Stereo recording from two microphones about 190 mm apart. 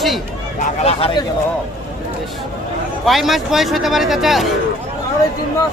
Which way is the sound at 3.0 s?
Centre (ahead or behind).